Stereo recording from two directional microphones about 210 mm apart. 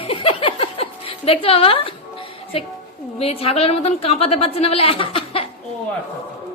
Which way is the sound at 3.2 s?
25° left (ahead or behind).